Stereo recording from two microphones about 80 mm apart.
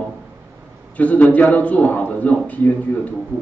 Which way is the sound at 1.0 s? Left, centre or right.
Centre.